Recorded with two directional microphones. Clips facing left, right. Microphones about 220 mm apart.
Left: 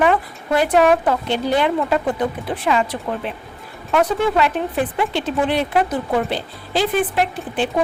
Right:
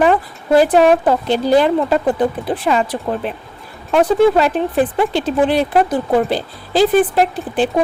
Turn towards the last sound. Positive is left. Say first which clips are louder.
# right 5 dB
turn(degrees=-35)  # may be behind; listen again after turning